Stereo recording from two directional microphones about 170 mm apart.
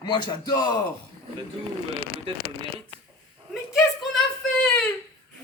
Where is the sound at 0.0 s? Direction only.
25° left (ahead or behind).